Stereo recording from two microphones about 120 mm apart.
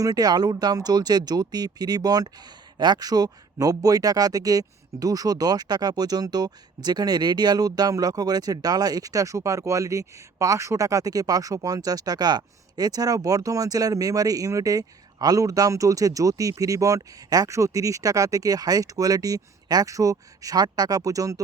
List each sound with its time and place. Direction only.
0.0 s speech: 30° right (ahead or behind)